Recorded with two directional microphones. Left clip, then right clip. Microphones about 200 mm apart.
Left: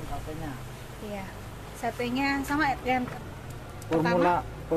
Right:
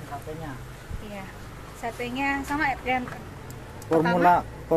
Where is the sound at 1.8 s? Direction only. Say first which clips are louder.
Even; 20° left (ahead or behind).